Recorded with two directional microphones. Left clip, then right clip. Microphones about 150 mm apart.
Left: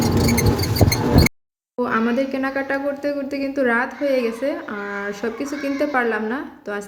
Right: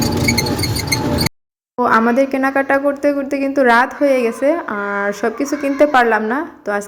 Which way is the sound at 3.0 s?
5° right (ahead or behind).